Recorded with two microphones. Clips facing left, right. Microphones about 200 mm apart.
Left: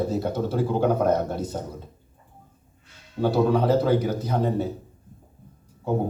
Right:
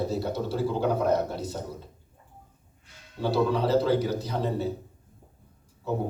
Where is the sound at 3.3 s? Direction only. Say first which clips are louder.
Left 2 dB; 50° left (ahead or behind).